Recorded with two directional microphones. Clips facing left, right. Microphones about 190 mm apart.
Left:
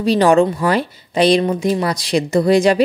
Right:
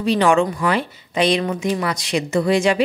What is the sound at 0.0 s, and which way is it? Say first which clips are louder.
Speech: left 4 dB; 35° left (ahead or behind).